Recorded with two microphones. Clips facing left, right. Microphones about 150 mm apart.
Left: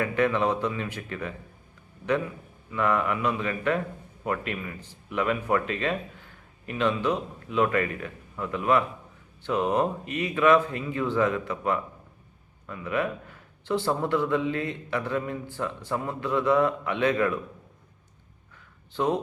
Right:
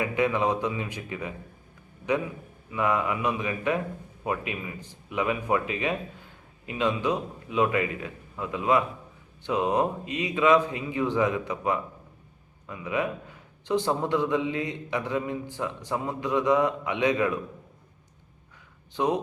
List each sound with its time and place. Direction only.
0.0 s a man's voice: 15° right (ahead or behind)
2.7 s a man's voice: 15° right (ahead or behind)
18.9 s a man's voice: 15° right (ahead or behind)